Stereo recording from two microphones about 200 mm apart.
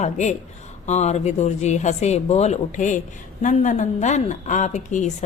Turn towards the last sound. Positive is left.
turn(degrees=35)  # may be behind; listen again after turning